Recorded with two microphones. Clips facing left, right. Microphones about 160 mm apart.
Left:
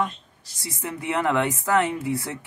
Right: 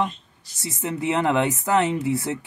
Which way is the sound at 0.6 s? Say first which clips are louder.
Right 5 dB; 20° right (ahead or behind).